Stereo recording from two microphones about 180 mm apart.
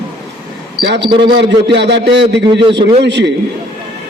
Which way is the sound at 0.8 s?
70° right (ahead or behind).